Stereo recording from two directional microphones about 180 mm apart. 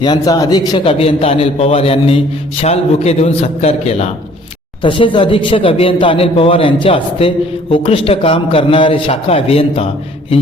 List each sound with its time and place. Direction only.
0.0 s a man's voice: 25° left (ahead or behind)